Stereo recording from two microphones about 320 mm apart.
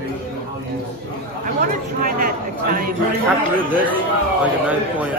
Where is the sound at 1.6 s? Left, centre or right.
Right.